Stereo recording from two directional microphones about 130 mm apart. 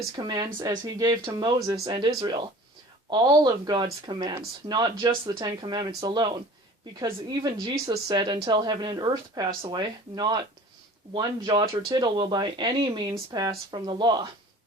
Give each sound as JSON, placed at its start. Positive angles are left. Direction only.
{"t": 0.2, "sound": "speech", "side_deg": -35}
{"t": 1.9, "sound": "speech", "side_deg": -35}